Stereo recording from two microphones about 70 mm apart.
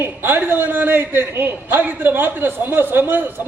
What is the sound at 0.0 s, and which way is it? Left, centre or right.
A man's voice, right.